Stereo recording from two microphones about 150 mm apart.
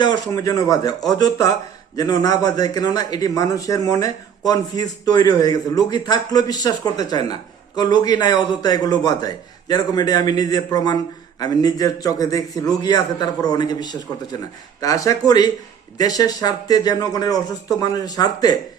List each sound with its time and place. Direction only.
0.0 s a man's voice: 25° left (ahead or behind)
2.0 s a man's voice: 25° left (ahead or behind)